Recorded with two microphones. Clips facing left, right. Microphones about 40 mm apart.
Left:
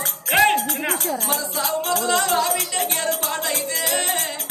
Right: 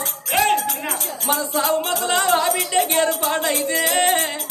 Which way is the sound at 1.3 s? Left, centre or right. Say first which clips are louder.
Right 4 dB; right.